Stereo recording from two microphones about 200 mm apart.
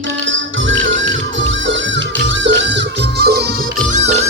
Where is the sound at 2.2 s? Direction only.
65° right (ahead or behind).